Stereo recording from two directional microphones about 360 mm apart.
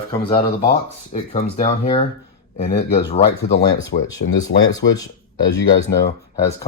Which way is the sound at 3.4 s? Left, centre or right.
Left.